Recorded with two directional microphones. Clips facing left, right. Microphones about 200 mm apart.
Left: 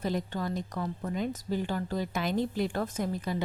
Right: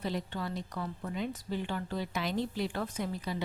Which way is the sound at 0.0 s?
45° left (ahead or behind).